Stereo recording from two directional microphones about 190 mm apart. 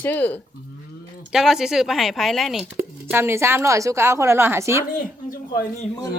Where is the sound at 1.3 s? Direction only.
Centre (ahead or behind).